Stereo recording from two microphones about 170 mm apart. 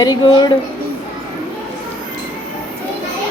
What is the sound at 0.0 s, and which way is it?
Speech, 25° left (ahead or behind).